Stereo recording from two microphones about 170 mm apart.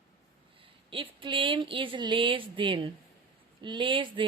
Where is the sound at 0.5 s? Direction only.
30° right (ahead or behind).